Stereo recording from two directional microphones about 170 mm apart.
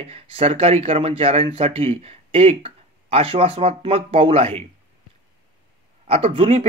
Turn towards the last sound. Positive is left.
turn(degrees=-35)  # may be behind; listen again after turning